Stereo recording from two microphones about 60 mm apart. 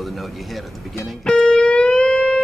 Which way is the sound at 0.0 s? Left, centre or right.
Centre.